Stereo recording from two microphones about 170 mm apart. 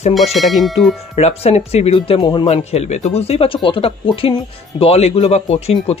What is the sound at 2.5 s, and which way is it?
Speech, 40° left (ahead or behind).